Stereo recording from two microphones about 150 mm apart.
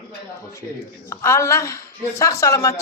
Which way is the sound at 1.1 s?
20° left (ahead or behind).